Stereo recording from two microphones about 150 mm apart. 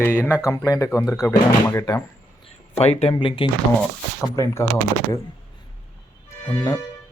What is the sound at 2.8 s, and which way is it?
Speech, 45° left (ahead or behind).